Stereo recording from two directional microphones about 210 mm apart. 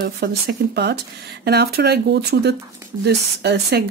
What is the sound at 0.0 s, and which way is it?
Speech, 50° right (ahead or behind).